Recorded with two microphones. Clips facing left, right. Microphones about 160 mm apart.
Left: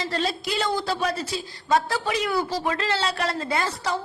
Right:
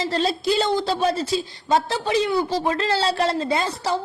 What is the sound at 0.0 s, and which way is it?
Speech, 30° right (ahead or behind).